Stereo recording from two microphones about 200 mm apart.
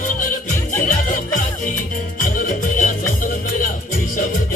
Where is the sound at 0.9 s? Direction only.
40° left (ahead or behind).